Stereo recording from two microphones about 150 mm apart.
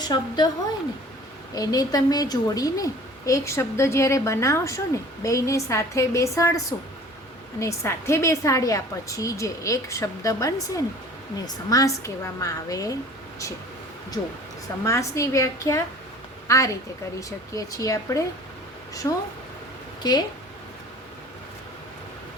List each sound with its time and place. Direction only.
0.0 s a woman's voice: 25° left (ahead or behind)
1.5 s a woman's voice: 25° left (ahead or behind)
14.8 s a woman's voice: 20° left (ahead or behind)